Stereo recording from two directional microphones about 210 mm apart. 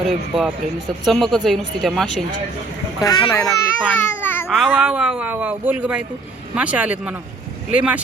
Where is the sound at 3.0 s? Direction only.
20° left (ahead or behind).